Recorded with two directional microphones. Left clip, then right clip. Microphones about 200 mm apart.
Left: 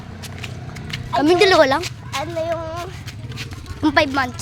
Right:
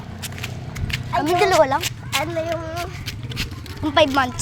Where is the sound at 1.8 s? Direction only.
60° right (ahead or behind).